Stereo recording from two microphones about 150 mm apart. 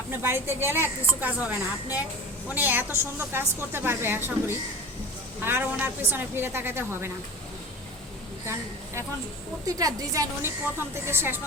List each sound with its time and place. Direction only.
0.2 s a woman's voice: 15° right (ahead or behind)
2.6 s a woman's voice: 10° right (ahead or behind)
9.6 s a woman's voice: 25° right (ahead or behind)